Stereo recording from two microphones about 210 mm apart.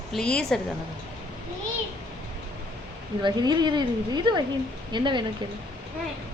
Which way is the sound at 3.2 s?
20° right (ahead or behind).